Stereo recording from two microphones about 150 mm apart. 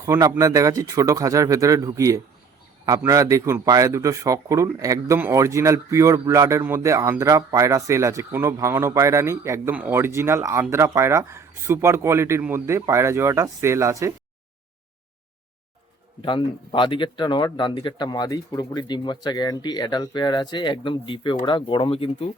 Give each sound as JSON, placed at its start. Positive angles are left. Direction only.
{"t": 0.0, "sound": "speech", "side_deg": -20}
{"t": 16.2, "sound": "speech", "side_deg": 35}